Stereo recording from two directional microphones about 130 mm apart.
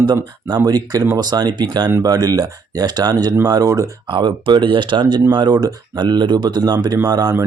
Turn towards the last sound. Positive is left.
turn(degrees=-30)  # may be behind; listen again after turning